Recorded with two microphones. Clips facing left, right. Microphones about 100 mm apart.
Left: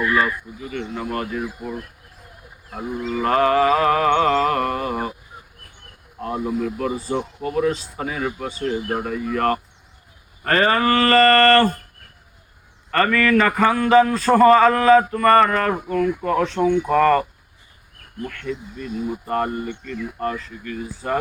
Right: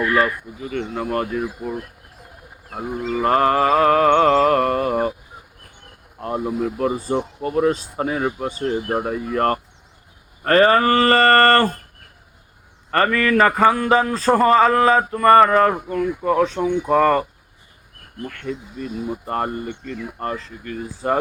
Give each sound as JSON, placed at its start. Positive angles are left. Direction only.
{"t": 0.6, "sound": "speech", "side_deg": -45}
{"t": 6.2, "sound": "speech", "side_deg": -35}
{"t": 12.9, "sound": "speech", "side_deg": -30}
{"t": 16.9, "sound": "speech", "side_deg": -20}
{"t": 18.3, "sound": "speech", "side_deg": -30}